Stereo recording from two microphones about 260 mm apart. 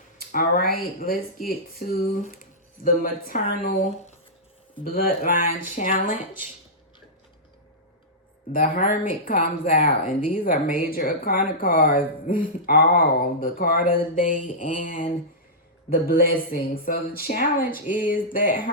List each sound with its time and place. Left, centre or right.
0.2 s speech: left
8.5 s speech: left